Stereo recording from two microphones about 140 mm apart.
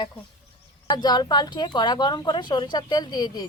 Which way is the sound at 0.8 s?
30° left (ahead or behind).